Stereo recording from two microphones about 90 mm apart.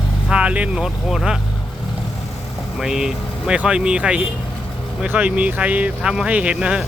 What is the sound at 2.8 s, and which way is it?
Speech, 5° right (ahead or behind).